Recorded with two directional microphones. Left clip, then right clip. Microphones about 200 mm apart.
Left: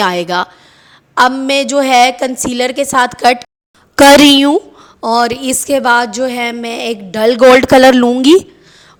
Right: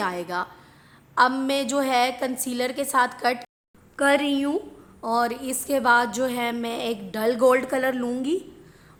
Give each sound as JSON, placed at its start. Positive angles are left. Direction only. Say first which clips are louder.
{"t": 0.0, "sound": "a woman's voice", "louder": "left 14 dB", "side_deg": 40}
{"t": 3.9, "sound": "speech", "louder": "left 17 dB", "side_deg": 60}
{"t": 4.5, "sound": "a woman's voice", "louder": "left 14 dB", "side_deg": 40}